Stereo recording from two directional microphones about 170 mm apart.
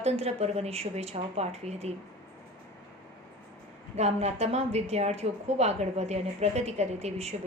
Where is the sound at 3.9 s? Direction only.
40° right (ahead or behind).